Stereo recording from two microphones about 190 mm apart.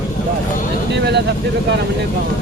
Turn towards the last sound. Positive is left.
turn(degrees=-60)  # may be behind; listen again after turning